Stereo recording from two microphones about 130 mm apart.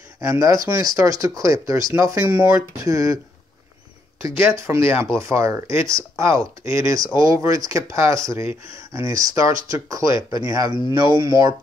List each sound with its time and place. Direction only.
0.2 s speech: 25° right (ahead or behind)
4.2 s speech: 20° right (ahead or behind)